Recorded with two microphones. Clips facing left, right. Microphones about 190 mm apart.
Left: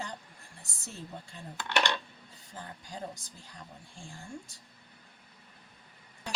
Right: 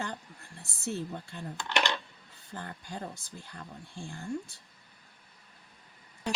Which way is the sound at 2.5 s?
65° right (ahead or behind).